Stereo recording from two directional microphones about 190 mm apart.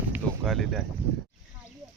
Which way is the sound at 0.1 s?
Centre (ahead or behind).